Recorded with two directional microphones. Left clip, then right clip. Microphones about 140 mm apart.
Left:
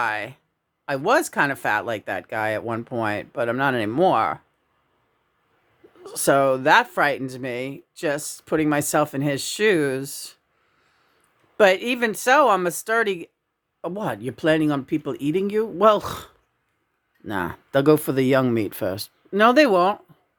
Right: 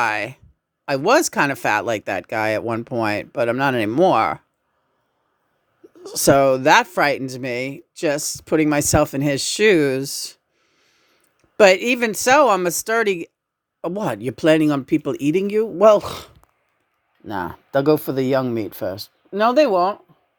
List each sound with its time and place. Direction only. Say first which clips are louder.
0.0 s speech: right 4 dB; 45° right (ahead or behind)
6.0 s speech: right 4 dB; 35° right (ahead or behind)
10.8 s a sound: right 3 dB; 25° right (ahead or behind)
11.5 s speech: right 4 dB; 40° right (ahead or behind); by 16.0 s 25° right (ahead or behind)
16.0 s speech: right 4 dB; centre (ahead or behind); by 19.9 s 30° left (ahead or behind)